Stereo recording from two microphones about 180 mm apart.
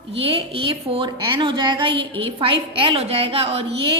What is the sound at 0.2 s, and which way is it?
A woman's voice, 30° right (ahead or behind).